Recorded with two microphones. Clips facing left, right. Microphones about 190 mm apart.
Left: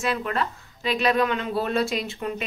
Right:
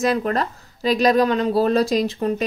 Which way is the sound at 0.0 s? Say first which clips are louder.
Right 6 dB; 40° right (ahead or behind).